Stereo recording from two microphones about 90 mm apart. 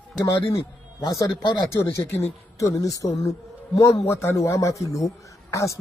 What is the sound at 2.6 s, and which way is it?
A man's voice, 40° left (ahead or behind).